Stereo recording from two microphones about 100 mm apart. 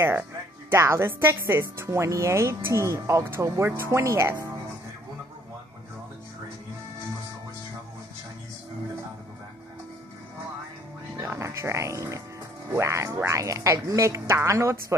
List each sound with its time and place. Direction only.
0.0 s speech: 25° right (ahead or behind)
11.1 s speech: 30° right (ahead or behind)